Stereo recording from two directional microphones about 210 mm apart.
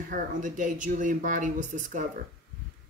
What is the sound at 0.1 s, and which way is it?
Speech, 40° right (ahead or behind).